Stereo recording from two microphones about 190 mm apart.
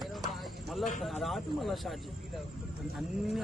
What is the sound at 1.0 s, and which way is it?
Speech, centre (ahead or behind).